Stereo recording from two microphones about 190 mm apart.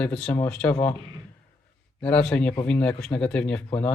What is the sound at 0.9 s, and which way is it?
Speech, 25° right (ahead or behind).